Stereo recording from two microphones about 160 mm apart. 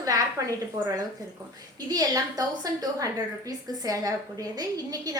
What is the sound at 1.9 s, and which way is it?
A woman's voice, 25° right (ahead or behind).